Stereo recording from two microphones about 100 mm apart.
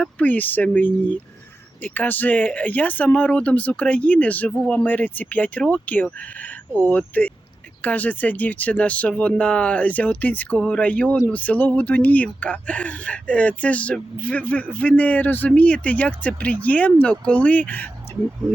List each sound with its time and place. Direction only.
0.0 s speech: 15° left (ahead or behind)